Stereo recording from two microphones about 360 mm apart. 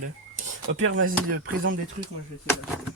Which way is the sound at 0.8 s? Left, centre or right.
Right.